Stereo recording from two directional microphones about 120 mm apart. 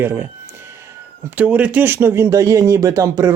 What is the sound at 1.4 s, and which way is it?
Speech, 10° right (ahead or behind).